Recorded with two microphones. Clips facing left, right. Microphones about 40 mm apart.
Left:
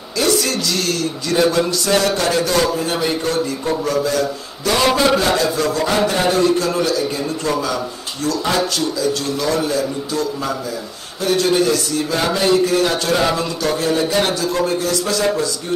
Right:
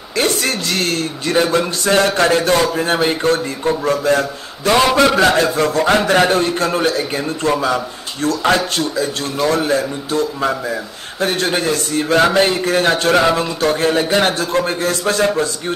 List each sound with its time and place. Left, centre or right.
0.2 s a man's voice: right